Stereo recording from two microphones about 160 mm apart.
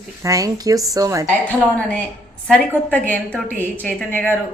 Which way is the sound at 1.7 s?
10° left (ahead or behind).